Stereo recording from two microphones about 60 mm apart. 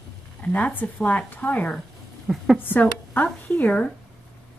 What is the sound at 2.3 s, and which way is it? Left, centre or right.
Speech, centre.